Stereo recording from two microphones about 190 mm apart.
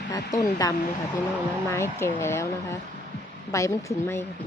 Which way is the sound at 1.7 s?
15° left (ahead or behind).